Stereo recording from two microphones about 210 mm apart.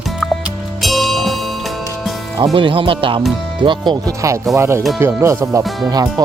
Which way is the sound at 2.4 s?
25° right (ahead or behind).